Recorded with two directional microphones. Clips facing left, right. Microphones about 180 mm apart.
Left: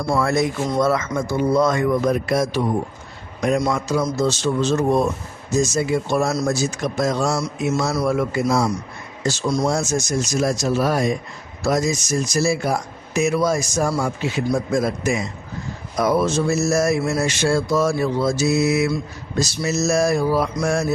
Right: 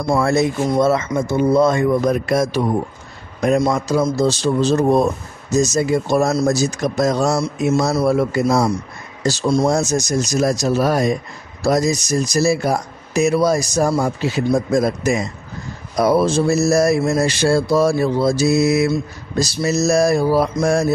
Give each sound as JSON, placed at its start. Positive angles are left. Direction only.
{"t": 0.2, "sound": "speech", "side_deg": -30}
{"t": 2.0, "sound": "a man's voice", "side_deg": -45}
{"t": 3.6, "sound": "mantra", "side_deg": -30}